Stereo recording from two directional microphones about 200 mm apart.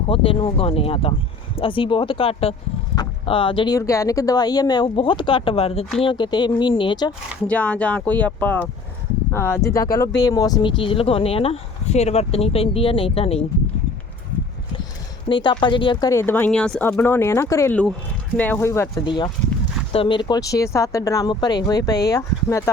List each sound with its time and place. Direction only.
0.1 s speech: 25° left (ahead or behind)
7.4 s speech: 5° left (ahead or behind); by 13.4 s 30° left (ahead or behind)
15.3 s speech: 25° left (ahead or behind)